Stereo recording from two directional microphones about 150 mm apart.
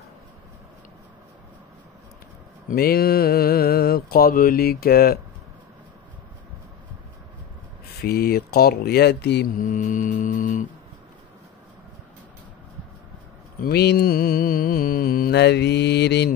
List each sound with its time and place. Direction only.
2.7 s mantra: 90° left
8.0 s speech: 90° left; by 10.7 s 60° left (ahead or behind)
13.6 s mantra: 90° left